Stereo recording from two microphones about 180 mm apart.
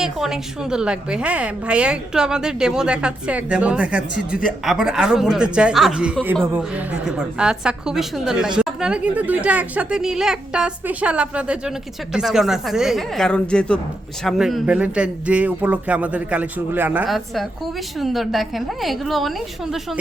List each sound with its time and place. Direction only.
0.0 s a woman's voice: 5° right (ahead or behind)